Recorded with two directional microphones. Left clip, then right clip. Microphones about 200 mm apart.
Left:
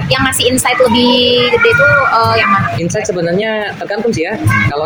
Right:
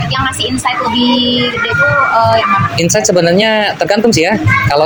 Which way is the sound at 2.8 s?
35° right (ahead or behind).